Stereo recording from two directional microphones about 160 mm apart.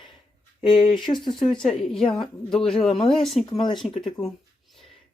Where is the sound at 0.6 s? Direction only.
30° left (ahead or behind).